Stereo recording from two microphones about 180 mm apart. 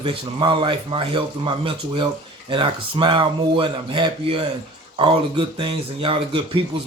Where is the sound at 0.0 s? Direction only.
30° right (ahead or behind).